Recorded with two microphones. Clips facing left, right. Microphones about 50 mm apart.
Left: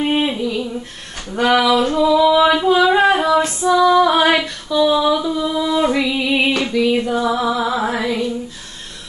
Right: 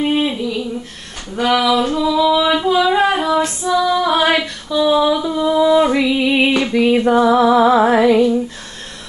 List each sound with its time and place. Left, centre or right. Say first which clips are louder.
0.0 s humming: right 1 dB; centre
1.3 s a sound: left 1 dB; centre
3.4 s female singing: left 3 dB; centre
6.7 s music: right 4 dB; right